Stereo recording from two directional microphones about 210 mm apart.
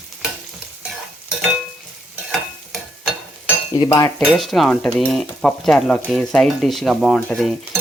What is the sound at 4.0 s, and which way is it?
Stir, centre (ahead or behind).